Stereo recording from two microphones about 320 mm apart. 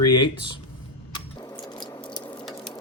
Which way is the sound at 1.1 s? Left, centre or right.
Centre.